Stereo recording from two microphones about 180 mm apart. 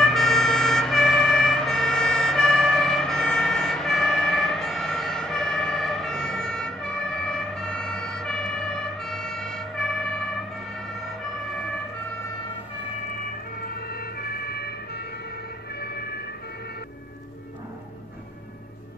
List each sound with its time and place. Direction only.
0.0 s emergency vehicle: centre (ahead or behind)
13.6 s emergency vehicle: 60° left (ahead or behind)